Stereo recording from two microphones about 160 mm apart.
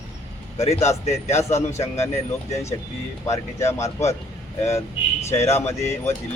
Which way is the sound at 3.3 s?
20° left (ahead or behind).